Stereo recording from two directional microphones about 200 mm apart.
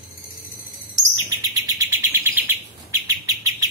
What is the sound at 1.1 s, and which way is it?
Chirp, 20° right (ahead or behind).